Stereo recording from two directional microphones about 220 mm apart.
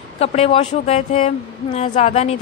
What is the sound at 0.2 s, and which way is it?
A woman's voice, 30° left (ahead or behind).